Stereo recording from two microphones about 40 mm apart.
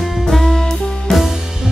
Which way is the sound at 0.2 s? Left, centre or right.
Centre.